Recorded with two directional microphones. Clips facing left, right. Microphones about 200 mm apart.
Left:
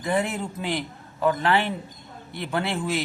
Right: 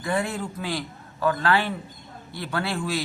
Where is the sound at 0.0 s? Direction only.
20° left (ahead or behind).